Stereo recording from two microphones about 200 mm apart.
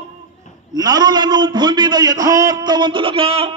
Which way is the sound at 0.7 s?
20° right (ahead or behind).